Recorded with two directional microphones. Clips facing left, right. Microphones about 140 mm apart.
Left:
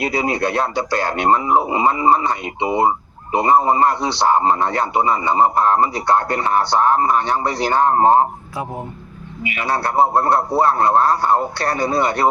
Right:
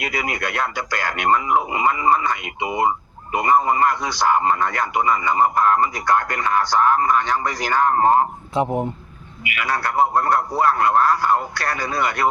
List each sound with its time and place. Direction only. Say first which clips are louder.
0.0 s a man's voice: left 6 dB; 30° left (ahead or behind)
8.6 s speech: right 7 dB; 25° right (ahead or behind)
9.4 s speech: left 3 dB; 30° left (ahead or behind)